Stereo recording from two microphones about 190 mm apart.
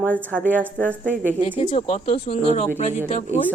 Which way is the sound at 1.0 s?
45° right (ahead or behind).